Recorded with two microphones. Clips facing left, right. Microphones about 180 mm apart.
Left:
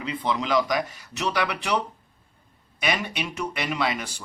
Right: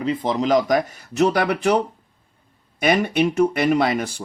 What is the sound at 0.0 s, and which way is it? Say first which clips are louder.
Speech: right 6 dB; 45° right (ahead or behind).